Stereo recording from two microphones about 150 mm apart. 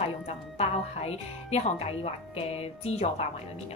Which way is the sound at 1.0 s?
45° left (ahead or behind).